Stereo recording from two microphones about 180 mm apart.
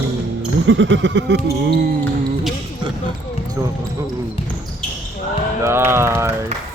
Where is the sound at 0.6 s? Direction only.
90° right; by 1.9 s 65° right (ahead or behind).